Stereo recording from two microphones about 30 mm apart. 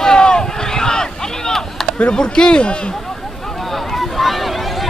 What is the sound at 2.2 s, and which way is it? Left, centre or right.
Speech, left.